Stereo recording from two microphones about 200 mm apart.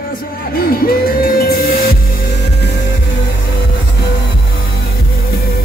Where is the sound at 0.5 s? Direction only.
50° left (ahead or behind).